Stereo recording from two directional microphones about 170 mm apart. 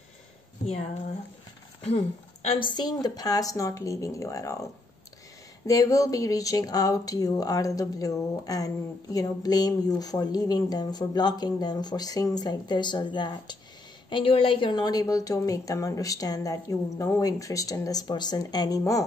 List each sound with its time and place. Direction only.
1.8 s speech: 40° left (ahead or behind); by 4.6 s 20° left (ahead or behind)
5.7 s speech: 20° left (ahead or behind)